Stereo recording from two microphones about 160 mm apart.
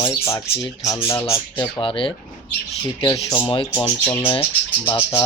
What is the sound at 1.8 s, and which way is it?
Speech, 30° left (ahead or behind).